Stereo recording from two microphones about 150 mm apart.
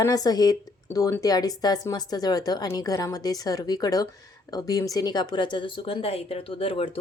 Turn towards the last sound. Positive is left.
turn(degrees=35)  # may be behind; listen again after turning